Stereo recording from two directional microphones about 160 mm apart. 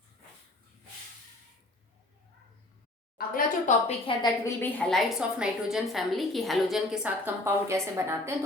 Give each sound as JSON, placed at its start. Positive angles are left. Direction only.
{"t": 3.2, "sound": "a woman's voice", "side_deg": 60}
{"t": 4.2, "sound": "a woman's voice", "side_deg": 20}
{"t": 4.8, "sound": "a woman's voice", "side_deg": 0}